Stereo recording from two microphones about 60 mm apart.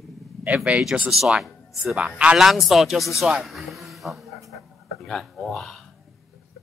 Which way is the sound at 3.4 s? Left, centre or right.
Centre.